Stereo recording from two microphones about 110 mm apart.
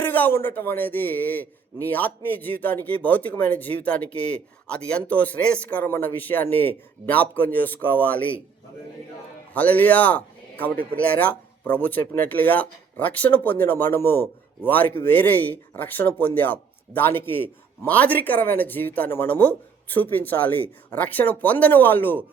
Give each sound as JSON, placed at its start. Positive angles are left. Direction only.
{"t": 0.0, "sound": "speech", "side_deg": 20}
{"t": 9.5, "sound": "speech", "side_deg": 15}